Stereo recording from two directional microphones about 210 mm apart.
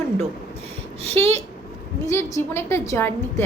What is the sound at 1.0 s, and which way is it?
Speech, 30° right (ahead or behind).